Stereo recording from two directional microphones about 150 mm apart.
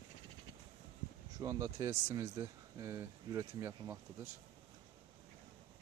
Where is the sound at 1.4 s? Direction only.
20° right (ahead or behind).